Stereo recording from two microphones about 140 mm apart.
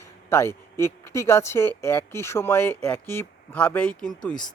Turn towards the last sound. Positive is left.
turn(degrees=5)  # may be behind; listen again after turning